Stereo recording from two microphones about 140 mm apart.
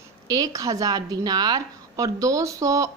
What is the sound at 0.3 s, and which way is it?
A woman's voice, 25° right (ahead or behind).